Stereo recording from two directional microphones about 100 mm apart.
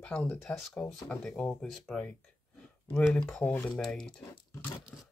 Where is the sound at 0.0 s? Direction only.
15° left (ahead or behind).